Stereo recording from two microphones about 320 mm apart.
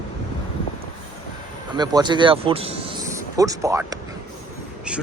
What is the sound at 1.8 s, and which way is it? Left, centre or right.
A man's voice, centre.